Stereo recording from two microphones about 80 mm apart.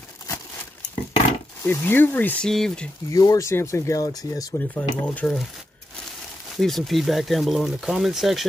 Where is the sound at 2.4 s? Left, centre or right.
Centre.